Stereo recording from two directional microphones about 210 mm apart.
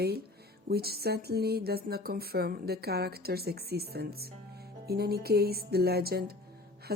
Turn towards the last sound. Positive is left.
turn(degrees=-50)  # may be behind; listen again after turning